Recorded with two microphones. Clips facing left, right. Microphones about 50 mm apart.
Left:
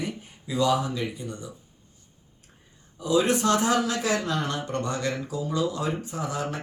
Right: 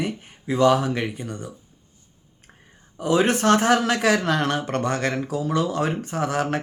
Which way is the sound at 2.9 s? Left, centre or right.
Right.